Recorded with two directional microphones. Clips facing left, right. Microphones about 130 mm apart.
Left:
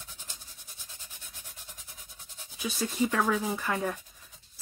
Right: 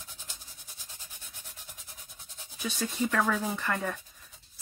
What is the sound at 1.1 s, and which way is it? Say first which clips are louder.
Rub: even; 10° right (ahead or behind).